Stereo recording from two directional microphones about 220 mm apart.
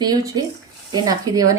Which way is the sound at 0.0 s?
20° right (ahead or behind).